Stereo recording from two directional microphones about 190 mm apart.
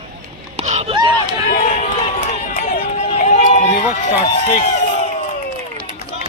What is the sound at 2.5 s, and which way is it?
Run, 50° left (ahead or behind).